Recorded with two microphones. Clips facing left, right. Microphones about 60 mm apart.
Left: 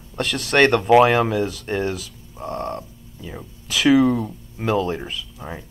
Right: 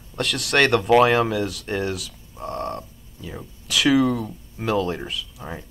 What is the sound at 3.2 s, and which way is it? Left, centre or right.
Speech, centre.